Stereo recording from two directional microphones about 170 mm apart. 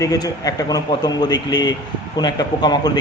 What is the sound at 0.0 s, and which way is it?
A man's voice, 20° left (ahead or behind).